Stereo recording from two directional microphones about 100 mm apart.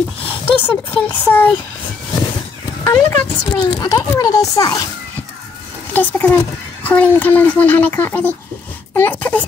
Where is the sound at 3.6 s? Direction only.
45° left (ahead or behind).